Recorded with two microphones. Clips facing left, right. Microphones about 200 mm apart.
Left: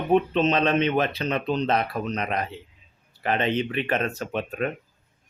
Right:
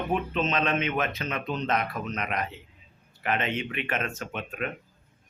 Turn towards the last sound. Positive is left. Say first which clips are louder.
# left 6 dB
turn(degrees=35)  # may be behind; listen again after turning